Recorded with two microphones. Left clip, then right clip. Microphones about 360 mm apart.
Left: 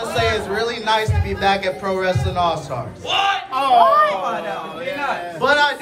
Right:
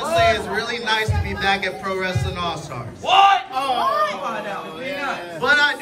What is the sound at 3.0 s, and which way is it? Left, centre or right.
Speech, centre.